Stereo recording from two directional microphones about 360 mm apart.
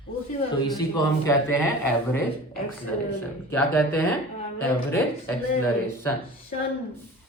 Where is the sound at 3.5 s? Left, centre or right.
Centre.